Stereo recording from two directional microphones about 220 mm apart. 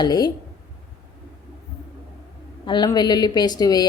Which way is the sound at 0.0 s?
20° left (ahead or behind).